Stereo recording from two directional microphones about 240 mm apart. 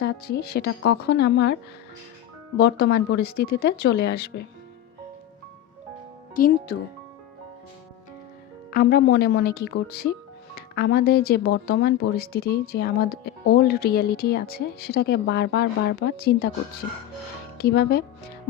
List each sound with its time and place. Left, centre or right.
0.0 s a woman's voice: left
2.6 s speech: left
6.3 s speech: left
8.7 s speech: left
17.6 s speech: left